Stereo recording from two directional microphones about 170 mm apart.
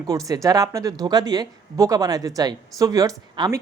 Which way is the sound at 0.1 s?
20° right (ahead or behind).